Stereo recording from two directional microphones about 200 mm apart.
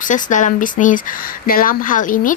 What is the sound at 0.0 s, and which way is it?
Speech, 40° left (ahead or behind).